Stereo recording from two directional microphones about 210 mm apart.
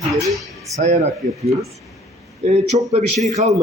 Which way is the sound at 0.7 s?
35° right (ahead or behind).